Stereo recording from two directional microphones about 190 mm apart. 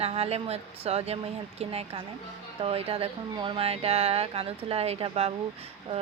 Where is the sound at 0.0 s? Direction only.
35° right (ahead or behind).